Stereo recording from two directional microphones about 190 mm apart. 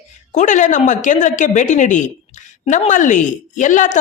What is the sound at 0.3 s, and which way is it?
A woman's voice, 40° left (ahead or behind).